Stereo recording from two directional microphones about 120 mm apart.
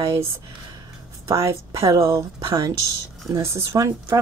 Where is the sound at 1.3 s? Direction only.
25° right (ahead or behind).